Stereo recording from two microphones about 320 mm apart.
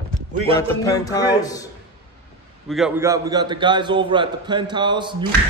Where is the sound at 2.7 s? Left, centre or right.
Centre.